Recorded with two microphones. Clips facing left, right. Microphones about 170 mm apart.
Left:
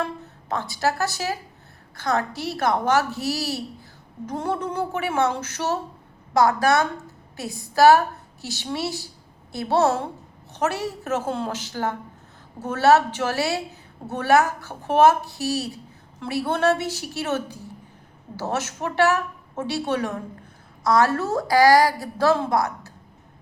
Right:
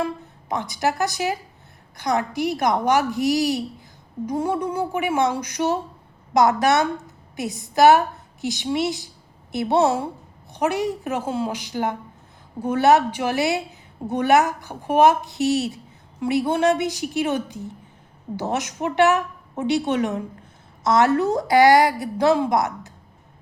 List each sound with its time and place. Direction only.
0.0 s a woman's voice: 15° right (ahead or behind)